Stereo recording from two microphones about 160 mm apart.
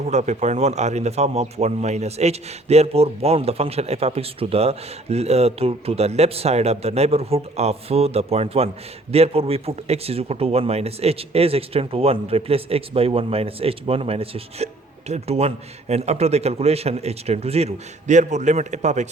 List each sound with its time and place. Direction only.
0.0 s speech: 45° right (ahead or behind)